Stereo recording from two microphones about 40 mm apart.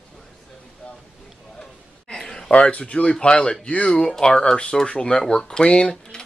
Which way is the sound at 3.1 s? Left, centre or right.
Left.